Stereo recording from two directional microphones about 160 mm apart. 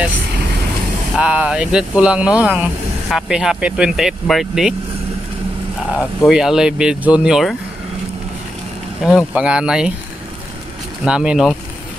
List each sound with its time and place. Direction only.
1.1 s speech: 10° right (ahead or behind)
5.9 s speech: 5° right (ahead or behind)
9.0 s speech: 5° right (ahead or behind)
11.1 s speech: 5° right (ahead or behind)